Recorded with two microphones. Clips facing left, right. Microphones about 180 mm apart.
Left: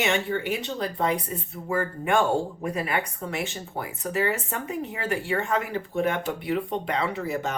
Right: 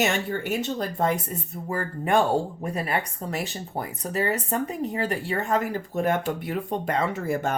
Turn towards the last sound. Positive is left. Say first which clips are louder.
# right 2 dB
turn(degrees=-50)  # may be behind; listen again after turning